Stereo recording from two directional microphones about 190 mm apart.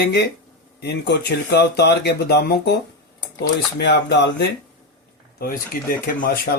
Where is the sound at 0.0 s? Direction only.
65° left (ahead or behind).